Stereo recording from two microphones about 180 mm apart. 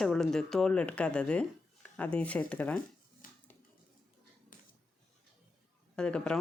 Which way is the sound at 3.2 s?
50° left (ahead or behind).